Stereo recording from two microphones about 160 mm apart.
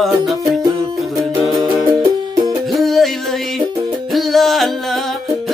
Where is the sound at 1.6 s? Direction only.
25° right (ahead or behind).